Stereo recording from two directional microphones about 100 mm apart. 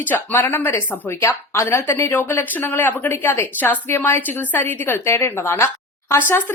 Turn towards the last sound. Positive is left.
turn(degrees=25)  # may be behind; listen again after turning